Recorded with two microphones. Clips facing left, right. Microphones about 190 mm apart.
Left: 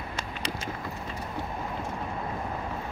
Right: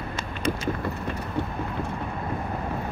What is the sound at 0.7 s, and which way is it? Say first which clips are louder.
Vehicle: right 6 dB; 65° right (ahead or behind).